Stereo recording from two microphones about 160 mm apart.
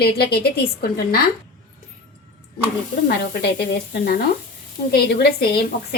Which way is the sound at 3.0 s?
90° left.